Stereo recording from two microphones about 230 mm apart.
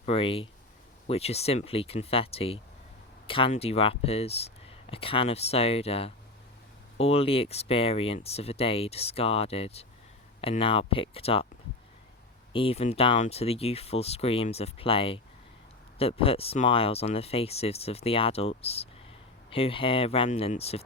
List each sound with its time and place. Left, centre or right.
0.0 s speech: left
12.5 s speech: left